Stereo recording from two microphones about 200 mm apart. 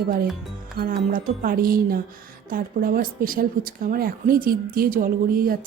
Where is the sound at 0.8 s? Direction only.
45° right (ahead or behind).